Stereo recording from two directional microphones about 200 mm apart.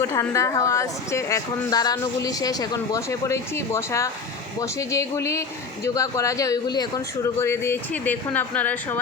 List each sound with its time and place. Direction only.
0.0 s a woman's voice: 15° left (ahead or behind)